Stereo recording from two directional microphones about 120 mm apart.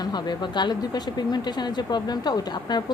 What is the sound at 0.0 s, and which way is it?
A woman's voice, 35° left (ahead or behind).